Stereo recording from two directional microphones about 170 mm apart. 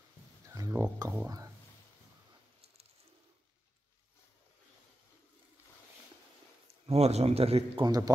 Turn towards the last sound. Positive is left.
turn(degrees=-35)  # may be behind; listen again after turning